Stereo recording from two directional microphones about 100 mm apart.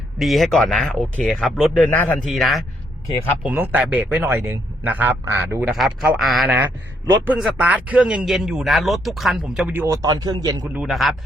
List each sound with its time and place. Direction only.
0.2 s speech: centre (ahead or behind)
2.2 s speech: centre (ahead or behind)
3.4 s a man's voice: 15° right (ahead or behind)
5.7 s speech: centre (ahead or behind)
7.3 s speech: 10° right (ahead or behind)
9.7 s speech: 25° right (ahead or behind)
10.0 s a man's voice: 40° right (ahead or behind)
10.8 s speech: centre (ahead or behind)